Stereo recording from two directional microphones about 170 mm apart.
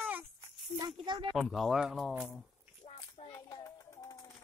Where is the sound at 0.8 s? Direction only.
25° right (ahead or behind).